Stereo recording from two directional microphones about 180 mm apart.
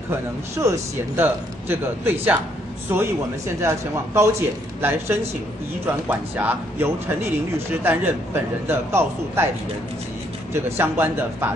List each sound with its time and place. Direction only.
0.1 s a man's voice: 15° right (ahead or behind)
10.5 s a man's voice: 15° right (ahead or behind)